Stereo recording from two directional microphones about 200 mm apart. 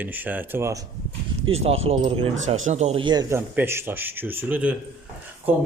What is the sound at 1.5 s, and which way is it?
Speech, 30° right (ahead or behind).